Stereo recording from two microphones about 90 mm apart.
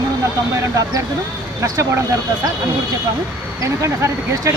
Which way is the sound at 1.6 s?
35° right (ahead or behind).